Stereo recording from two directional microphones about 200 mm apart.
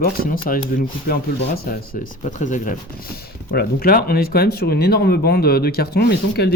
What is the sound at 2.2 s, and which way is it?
Speech, 40° left (ahead or behind).